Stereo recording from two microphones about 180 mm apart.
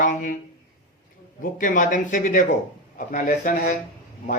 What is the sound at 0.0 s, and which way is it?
Speech, 45° left (ahead or behind).